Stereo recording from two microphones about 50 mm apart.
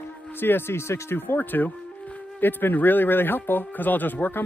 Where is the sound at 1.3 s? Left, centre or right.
Left.